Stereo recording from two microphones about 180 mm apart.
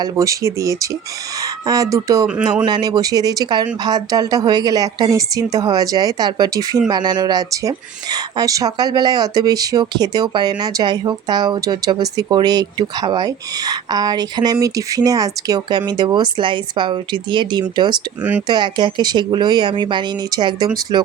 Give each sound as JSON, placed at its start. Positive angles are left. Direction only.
{"t": 0.0, "sound": "a woman's voice", "side_deg": -20}
{"t": 18.2, "sound": "speech", "side_deg": -10}
{"t": 18.4, "sound": "a woman's voice", "side_deg": -25}